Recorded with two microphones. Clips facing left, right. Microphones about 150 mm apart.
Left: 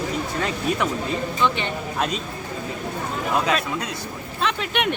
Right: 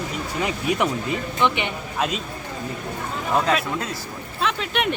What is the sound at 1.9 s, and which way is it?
Speech, 5° right (ahead or behind).